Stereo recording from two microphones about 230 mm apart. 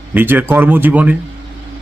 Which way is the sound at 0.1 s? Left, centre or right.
Centre.